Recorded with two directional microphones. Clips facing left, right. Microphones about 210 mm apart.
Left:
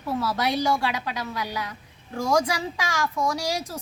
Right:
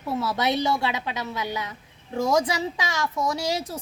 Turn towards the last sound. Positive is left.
turn(degrees=-25)  # may be behind; listen again after turning